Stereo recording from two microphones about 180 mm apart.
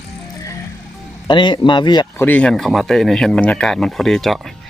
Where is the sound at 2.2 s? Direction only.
10° left (ahead or behind).